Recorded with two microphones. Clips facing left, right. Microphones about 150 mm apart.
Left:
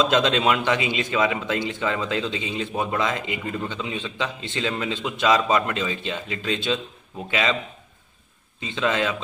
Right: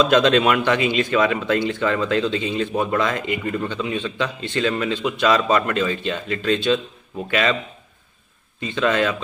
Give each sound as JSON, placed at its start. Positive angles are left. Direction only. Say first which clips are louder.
{"t": 0.0, "sound": "a man's voice", "louder": "right 4 dB", "side_deg": 20}
{"t": 8.5, "sound": "a man's voice", "louder": "right 4 dB", "side_deg": 20}